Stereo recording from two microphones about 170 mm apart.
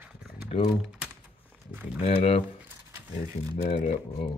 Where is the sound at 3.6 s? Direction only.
40° left (ahead or behind).